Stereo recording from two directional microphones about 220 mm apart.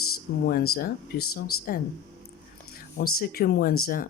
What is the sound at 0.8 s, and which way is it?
Speech, 45° left (ahead or behind).